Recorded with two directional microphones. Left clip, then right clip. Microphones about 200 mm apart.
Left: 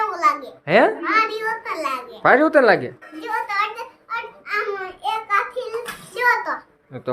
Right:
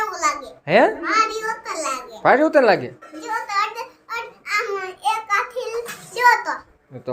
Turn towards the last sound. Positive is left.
turn(degrees=-15)  # may be behind; listen again after turning